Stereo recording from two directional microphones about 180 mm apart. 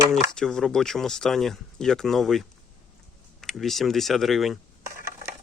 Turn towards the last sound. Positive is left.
turn(degrees=0)  # may be behind; listen again after turning